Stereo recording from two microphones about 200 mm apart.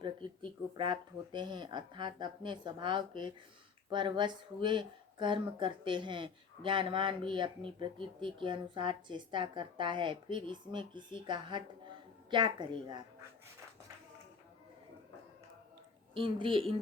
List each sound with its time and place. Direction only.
0.0 s speech: 25° right (ahead or behind)
16.1 s speech: 25° right (ahead or behind)